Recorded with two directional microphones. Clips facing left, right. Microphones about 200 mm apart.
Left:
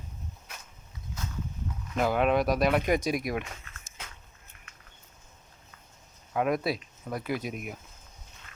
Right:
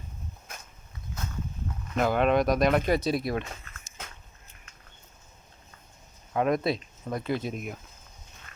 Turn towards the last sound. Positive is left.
turn(degrees=10)  # may be behind; listen again after turning